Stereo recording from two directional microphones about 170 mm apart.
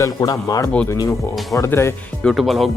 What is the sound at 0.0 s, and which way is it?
Speech, 20° left (ahead or behind).